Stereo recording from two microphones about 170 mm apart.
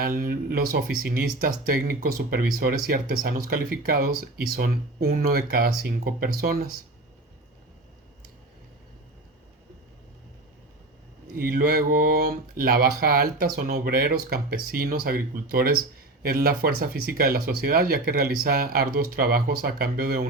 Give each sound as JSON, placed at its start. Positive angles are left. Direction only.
{"t": 0.2, "sound": "speech", "side_deg": -60}
{"t": 11.3, "sound": "speech", "side_deg": -60}